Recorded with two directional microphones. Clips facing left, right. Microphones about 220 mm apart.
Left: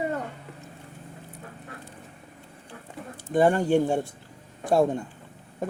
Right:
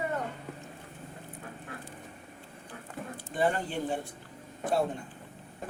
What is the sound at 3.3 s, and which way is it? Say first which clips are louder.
Speech: left 9 dB; 45° left (ahead or behind).